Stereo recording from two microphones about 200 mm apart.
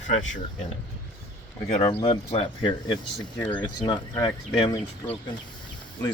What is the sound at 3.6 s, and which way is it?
Speech, 20° left (ahead or behind).